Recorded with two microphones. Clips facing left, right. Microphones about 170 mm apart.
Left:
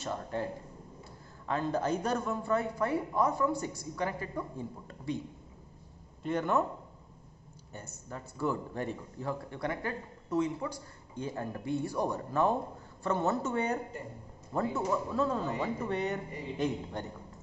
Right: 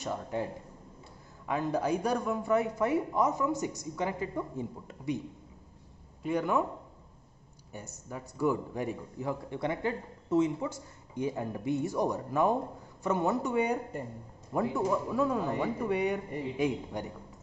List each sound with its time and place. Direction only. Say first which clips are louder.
0.0 s speech: right 1 dB; 15° right (ahead or behind)
6.2 s speech: right 1 dB; 10° right (ahead or behind)
7.7 s speech: right 2 dB; 15° right (ahead or behind)